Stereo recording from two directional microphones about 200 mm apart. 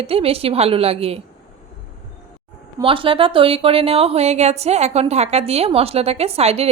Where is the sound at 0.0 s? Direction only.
30° right (ahead or behind).